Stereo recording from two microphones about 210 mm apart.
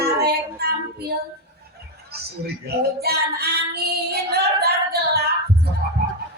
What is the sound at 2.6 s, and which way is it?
Child singing, 50° right (ahead or behind).